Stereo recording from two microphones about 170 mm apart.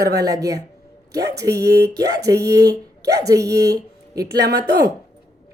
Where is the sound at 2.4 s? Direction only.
20° right (ahead or behind).